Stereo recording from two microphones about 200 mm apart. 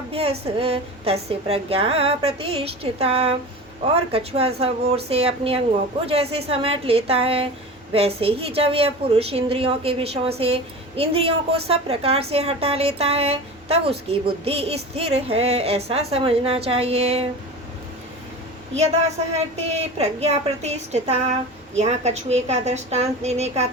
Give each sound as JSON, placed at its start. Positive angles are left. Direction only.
{"t": 0.1, "sound": "a woman's voice", "side_deg": -30}
{"t": 19.5, "sound": "a woman's voice", "side_deg": -30}